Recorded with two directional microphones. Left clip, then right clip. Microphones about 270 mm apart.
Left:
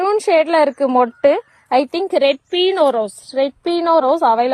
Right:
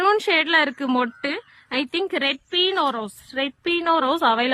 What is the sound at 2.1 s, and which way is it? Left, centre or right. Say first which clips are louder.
Speech: left 11 dB; centre.